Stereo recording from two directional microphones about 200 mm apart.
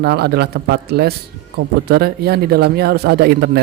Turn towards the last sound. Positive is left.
turn(degrees=-55)  # may be behind; listen again after turning